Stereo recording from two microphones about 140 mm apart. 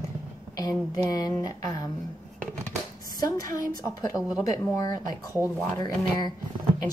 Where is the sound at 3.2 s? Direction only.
20° left (ahead or behind).